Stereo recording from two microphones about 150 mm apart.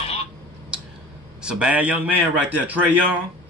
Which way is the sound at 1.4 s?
5° right (ahead or behind).